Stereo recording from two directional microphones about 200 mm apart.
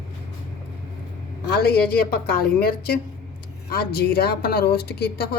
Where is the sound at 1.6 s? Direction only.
50° left (ahead or behind).